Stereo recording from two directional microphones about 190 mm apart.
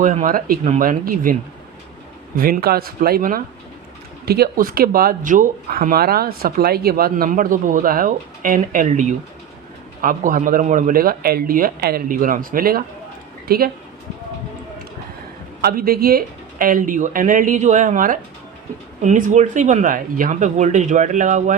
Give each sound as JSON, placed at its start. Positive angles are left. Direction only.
{"t": 0.0, "sound": "speech", "side_deg": -40}
{"t": 15.6, "sound": "speech", "side_deg": -50}